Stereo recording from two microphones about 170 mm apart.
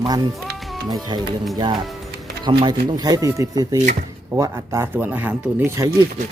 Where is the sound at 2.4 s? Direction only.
25° right (ahead or behind).